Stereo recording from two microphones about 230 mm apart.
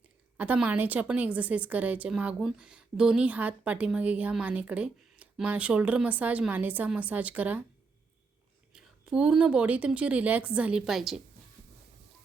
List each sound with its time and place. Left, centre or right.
0.3 s a woman's voice: centre
8.7 s a woman's voice: centre